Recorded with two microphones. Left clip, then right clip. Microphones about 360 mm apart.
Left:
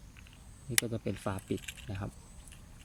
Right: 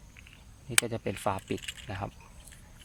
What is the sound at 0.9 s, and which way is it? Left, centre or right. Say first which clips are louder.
Speech: right 4 dB; right.